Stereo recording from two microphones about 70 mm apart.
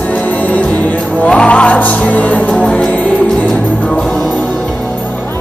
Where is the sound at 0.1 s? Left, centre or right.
Left.